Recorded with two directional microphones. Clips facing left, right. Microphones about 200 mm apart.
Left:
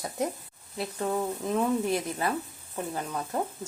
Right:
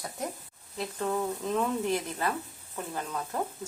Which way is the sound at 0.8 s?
10° left (ahead or behind).